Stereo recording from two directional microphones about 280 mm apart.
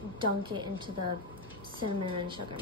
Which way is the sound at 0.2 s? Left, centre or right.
Centre.